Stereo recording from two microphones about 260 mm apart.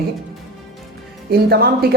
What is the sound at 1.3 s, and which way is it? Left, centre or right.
Speech, right.